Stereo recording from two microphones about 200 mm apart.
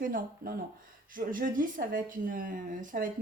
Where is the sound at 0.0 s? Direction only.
45° right (ahead or behind).